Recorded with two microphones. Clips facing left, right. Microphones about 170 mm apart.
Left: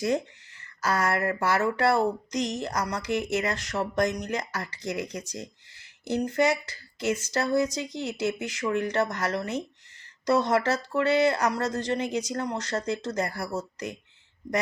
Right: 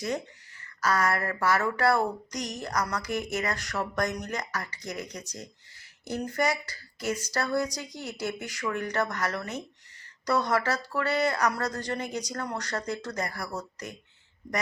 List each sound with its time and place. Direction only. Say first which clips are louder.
0.6 s speech: even; 25° left (ahead or behind)